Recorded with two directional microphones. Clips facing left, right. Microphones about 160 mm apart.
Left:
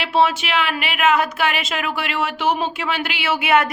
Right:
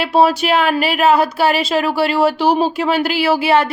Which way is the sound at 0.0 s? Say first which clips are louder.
Right 5 dB; 40° right (ahead or behind).